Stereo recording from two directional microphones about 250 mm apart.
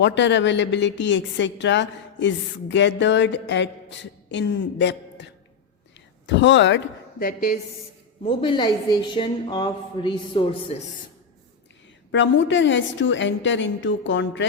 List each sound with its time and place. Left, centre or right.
0.0 s a woman's voice: left
8.2 s a woman's voice: left
12.1 s a woman's voice: left